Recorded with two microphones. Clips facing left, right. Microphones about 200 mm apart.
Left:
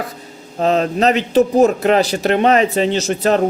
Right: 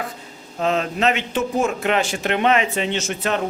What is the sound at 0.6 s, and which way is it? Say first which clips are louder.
A man's voice: left 5 dB; 35° left (ahead or behind).